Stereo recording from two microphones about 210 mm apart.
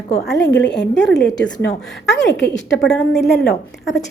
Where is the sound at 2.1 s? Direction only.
55° left (ahead or behind).